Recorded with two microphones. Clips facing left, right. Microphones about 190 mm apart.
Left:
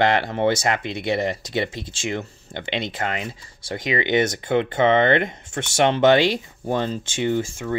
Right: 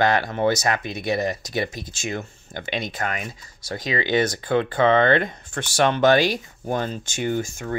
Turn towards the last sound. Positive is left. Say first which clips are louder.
# left 2 dB
turn(degrees=30)  # may be behind; listen again after turning